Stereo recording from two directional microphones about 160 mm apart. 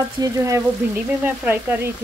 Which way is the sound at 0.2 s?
20° right (ahead or behind).